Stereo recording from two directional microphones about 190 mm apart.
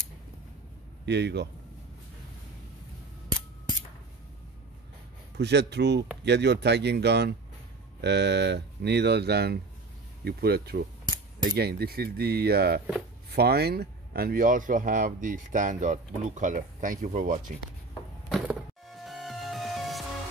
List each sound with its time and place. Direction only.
1.0 s speech: 65° right (ahead or behind)
5.4 s speech: 65° right (ahead or behind); by 17.4 s 45° right (ahead or behind)
18.3 s music: centre (ahead or behind)